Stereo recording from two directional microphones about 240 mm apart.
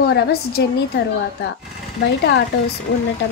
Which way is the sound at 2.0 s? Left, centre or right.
Left.